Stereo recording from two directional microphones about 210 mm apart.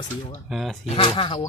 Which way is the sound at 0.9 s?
25° left (ahead or behind).